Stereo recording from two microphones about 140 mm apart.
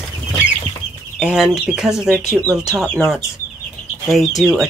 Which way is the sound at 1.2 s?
5° right (ahead or behind).